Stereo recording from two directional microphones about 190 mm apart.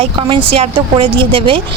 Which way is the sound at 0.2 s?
30° right (ahead or behind).